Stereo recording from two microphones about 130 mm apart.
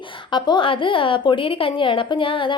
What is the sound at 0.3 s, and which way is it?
A woman's voice, 40° left (ahead or behind).